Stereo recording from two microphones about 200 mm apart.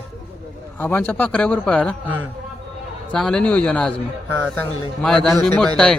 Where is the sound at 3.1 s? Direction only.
5° left (ahead or behind).